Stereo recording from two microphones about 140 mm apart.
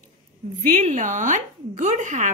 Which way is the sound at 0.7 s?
65° right (ahead or behind).